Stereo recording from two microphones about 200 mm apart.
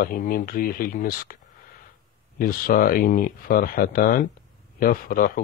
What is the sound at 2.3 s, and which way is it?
Speech, 45° left (ahead or behind).